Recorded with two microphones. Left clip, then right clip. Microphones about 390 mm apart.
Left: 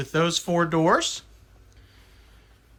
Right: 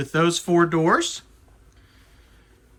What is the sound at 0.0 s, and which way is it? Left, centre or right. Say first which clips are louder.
Speech: right 2 dB; centre.